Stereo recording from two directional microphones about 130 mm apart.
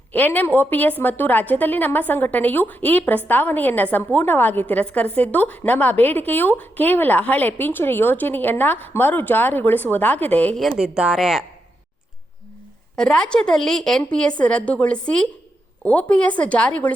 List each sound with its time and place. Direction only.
0.1 s a woman's voice: 15° left (ahead or behind)
10.6 s a woman's voice: 5° right (ahead or behind)
13.0 s a woman's voice: 5° left (ahead or behind)